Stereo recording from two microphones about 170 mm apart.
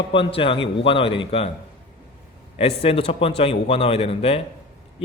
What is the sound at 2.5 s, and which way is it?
Speech, 35° left (ahead or behind).